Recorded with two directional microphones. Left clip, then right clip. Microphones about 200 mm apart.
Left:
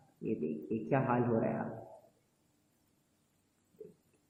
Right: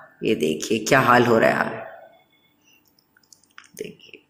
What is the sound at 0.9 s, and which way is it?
Speech, 25° right (ahead or behind).